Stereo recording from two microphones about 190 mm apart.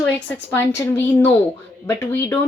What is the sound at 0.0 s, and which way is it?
Speech, 10° left (ahead or behind).